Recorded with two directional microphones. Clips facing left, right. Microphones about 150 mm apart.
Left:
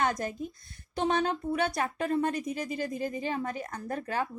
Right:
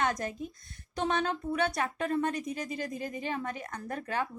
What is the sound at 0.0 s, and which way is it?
A woman's voice, 30° left (ahead or behind).